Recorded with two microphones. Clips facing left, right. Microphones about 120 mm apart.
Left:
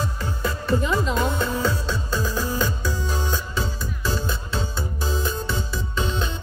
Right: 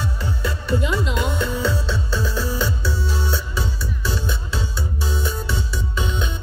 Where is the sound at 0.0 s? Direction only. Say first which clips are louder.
Even; 40° left (ahead or behind).